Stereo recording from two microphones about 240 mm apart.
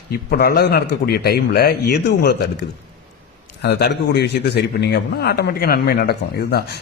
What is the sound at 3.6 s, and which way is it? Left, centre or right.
Speech, left.